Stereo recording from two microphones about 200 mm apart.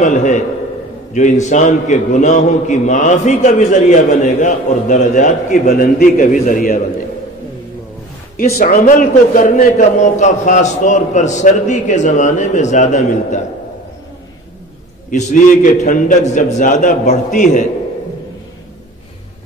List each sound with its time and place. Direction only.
0.0 s a man's voice: 35° left (ahead or behind)
8.5 s a man's voice: 45° left (ahead or behind)
15.0 s a man's voice: 40° left (ahead or behind)